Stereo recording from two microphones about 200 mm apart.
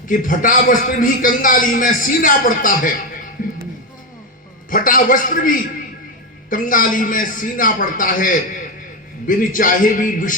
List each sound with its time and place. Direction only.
0.1 s a man's voice: 40° left (ahead or behind)
3.4 s music: 45° left (ahead or behind)
4.7 s a man's voice: 45° left (ahead or behind)